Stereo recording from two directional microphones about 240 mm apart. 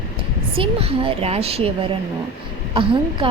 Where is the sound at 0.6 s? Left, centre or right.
Right.